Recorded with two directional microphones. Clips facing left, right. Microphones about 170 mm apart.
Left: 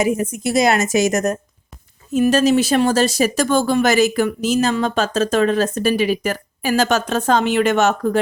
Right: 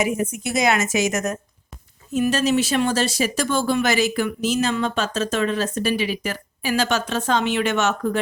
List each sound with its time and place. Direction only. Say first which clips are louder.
0.4 s a woman's voice: left 5 dB; 35° left (ahead or behind)